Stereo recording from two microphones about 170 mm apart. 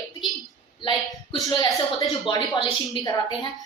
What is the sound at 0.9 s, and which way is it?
A woman's voice, 25° left (ahead or behind).